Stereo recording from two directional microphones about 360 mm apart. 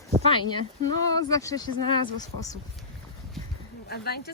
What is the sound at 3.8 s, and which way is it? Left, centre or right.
Speech, left.